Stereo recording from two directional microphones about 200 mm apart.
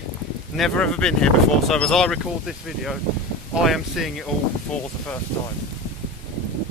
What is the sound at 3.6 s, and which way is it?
Speech, centre (ahead or behind).